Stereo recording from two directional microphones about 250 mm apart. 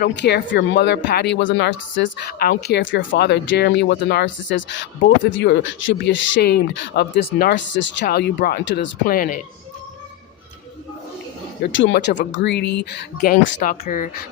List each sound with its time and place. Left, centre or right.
0.0 s speech: left
11.6 s speech: left
13.6 s speech: left